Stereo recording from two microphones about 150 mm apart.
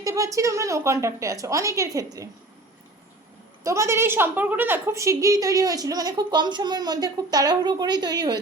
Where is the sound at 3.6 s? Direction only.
20° right (ahead or behind).